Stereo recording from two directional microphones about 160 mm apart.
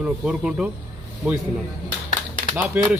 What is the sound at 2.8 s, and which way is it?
Speech, 10° right (ahead or behind).